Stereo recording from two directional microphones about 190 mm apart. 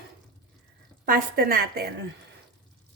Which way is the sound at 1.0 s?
50° right (ahead or behind).